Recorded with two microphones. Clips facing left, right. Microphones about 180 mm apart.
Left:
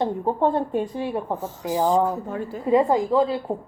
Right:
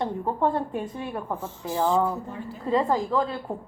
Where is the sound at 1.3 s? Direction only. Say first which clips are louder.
Left 4 dB; 45° left (ahead or behind).